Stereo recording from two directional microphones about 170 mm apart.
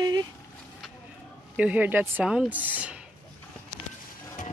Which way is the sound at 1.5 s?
10° right (ahead or behind).